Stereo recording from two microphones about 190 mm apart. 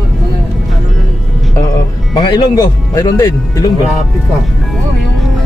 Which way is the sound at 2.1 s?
20° left (ahead or behind).